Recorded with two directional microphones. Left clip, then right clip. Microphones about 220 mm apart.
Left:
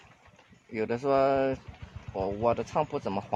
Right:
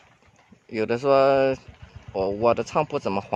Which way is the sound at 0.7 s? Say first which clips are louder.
Right 7 dB; 50° right (ahead or behind).